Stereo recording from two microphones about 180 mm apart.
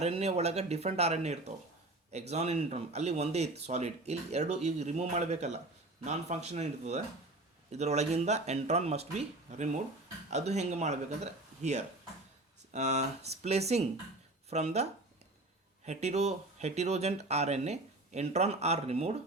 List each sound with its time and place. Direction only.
0.0 s speech: 35° right (ahead or behind)
15.9 s speech: 35° right (ahead or behind)